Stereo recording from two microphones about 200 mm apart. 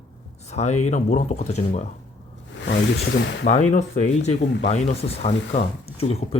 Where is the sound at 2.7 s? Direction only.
60° left (ahead or behind).